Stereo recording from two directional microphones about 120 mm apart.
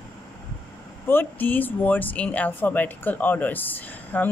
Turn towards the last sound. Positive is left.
turn(degrees=15)  # may be behind; listen again after turning